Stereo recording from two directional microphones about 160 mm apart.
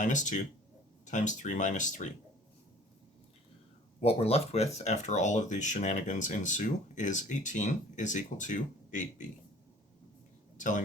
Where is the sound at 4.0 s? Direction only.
40° left (ahead or behind).